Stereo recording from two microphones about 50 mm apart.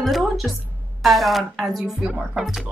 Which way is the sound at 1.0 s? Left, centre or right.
Centre.